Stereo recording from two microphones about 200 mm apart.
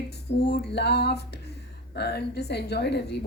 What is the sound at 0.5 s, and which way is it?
A woman's voice, 55° left (ahead or behind).